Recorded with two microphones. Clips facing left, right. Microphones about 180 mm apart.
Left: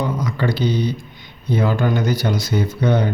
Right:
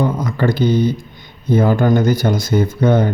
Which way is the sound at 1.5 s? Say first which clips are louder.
Right 5 dB; 50° right (ahead or behind).